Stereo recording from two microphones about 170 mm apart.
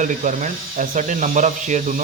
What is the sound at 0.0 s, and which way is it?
Speech, 45° right (ahead or behind).